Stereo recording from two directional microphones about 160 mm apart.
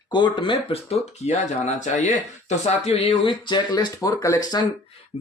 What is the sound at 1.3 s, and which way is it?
Speech, 45° left (ahead or behind).